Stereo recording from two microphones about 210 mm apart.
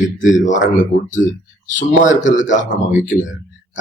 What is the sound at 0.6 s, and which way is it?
Speech, 65° left (ahead or behind).